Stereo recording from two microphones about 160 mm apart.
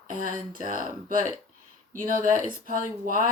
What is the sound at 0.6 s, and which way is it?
Speech, 55° right (ahead or behind).